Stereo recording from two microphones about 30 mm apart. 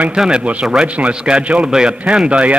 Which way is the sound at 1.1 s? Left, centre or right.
Right.